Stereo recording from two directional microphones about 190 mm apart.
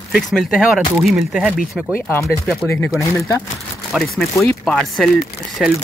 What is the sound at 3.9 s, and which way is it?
Speech, centre (ahead or behind).